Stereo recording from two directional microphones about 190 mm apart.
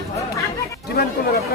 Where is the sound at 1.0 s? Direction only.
55° left (ahead or behind).